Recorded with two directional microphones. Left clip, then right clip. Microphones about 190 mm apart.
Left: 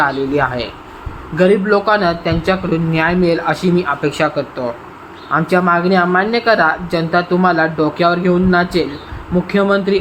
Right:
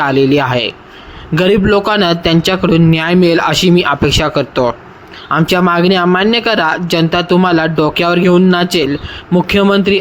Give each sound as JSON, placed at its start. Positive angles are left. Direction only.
{"t": 0.0, "sound": "speech", "side_deg": -30}